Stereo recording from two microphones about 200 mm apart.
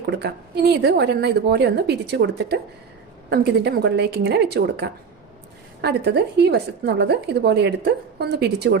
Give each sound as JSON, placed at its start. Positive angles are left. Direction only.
{"t": 0.0, "sound": "a woman's voice", "side_deg": -55}